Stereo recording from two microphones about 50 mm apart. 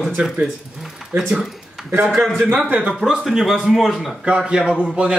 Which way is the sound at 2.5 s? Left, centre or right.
Right.